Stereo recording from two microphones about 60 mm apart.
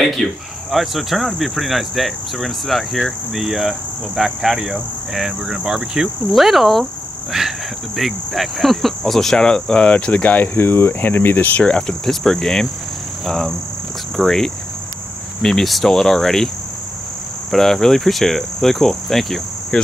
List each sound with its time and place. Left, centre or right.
0.0 s speech: centre
4.2 s cricket: centre
5.1 s speech: centre
7.3 s cricket: centre; by 11.6 s left
12.1 s speech: centre
13.2 s cricket: centre
14.1 s speech: centre
17.5 s speech: centre